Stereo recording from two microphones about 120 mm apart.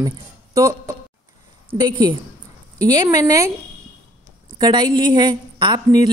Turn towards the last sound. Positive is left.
turn(degrees=-35)  # may be behind; listen again after turning